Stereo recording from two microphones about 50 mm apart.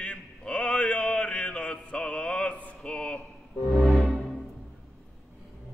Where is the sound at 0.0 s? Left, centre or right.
Left.